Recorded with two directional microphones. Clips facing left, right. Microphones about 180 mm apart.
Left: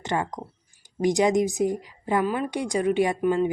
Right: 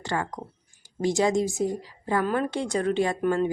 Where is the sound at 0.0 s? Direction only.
20° left (ahead or behind).